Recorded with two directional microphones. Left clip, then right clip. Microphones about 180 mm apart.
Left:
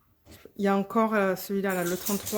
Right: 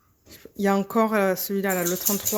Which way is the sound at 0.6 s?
15° right (ahead or behind).